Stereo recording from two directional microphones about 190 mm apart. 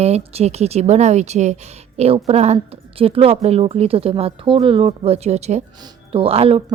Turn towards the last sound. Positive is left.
turn(degrees=-30)  # may be behind; listen again after turning